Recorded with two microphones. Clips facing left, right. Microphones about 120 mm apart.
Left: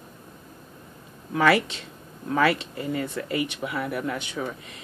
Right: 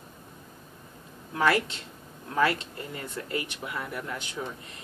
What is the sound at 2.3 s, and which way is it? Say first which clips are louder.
Speech: left 4 dB; 85° left.